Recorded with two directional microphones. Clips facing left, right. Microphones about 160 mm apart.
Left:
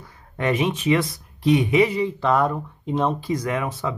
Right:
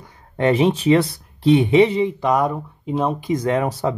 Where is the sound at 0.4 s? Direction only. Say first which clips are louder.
Right 6 dB; 30° right (ahead or behind).